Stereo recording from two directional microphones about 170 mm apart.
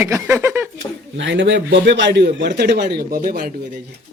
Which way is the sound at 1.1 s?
90° right.